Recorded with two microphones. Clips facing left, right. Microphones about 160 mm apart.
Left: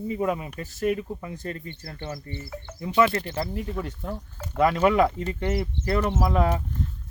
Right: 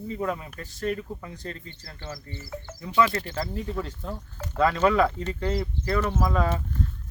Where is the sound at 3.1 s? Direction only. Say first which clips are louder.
Left 2 dB; 25° left (ahead or behind).